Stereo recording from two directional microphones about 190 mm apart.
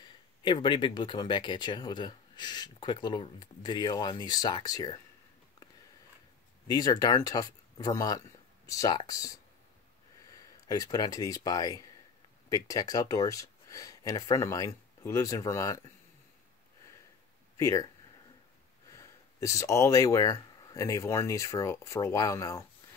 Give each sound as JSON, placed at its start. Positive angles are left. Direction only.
{"t": 0.0, "sound": "speech", "side_deg": 25}
{"t": 6.7, "sound": "speech", "side_deg": 20}
{"t": 17.6, "sound": "speech", "side_deg": 15}
{"t": 18.9, "sound": "speech", "side_deg": 15}